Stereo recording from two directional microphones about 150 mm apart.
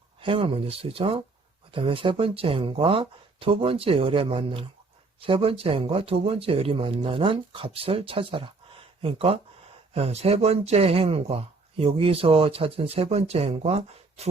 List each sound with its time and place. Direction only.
0.2 s speech: 35° right (ahead or behind)